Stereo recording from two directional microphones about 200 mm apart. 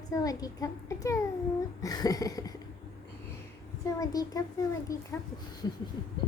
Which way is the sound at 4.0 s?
20° left (ahead or behind).